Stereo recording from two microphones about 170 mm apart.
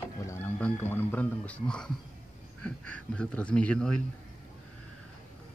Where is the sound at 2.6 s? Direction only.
5° left (ahead or behind).